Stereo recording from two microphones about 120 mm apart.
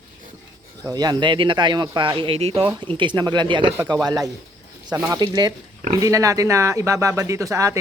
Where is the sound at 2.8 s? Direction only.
40° right (ahead or behind).